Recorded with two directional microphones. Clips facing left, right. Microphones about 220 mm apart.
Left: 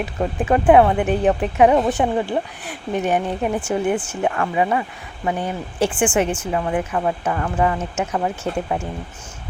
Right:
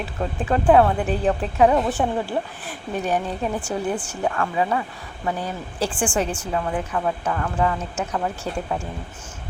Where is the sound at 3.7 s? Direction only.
10° left (ahead or behind).